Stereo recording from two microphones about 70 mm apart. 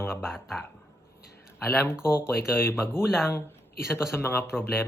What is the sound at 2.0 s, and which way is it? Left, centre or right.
Speech, left.